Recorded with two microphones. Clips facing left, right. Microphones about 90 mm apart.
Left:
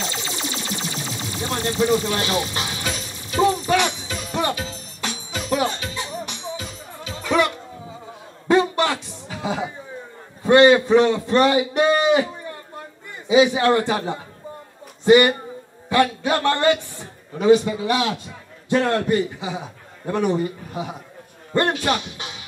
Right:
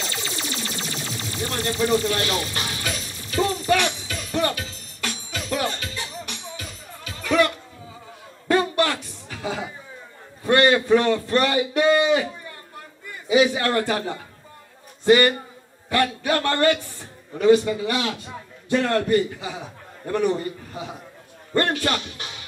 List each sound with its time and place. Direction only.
0.1 s a sound: 20° left (ahead or behind)
13.3 s a man's voice: 20° left (ahead or behind)
20.1 s a man's voice: 15° left (ahead or behind)